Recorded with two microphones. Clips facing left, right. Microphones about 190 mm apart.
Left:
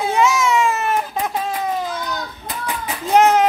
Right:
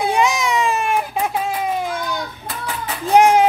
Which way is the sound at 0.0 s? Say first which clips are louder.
Left 1 dB; 15° right (ahead or behind).